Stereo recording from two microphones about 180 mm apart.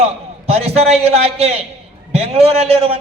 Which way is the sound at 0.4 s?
35° right (ahead or behind).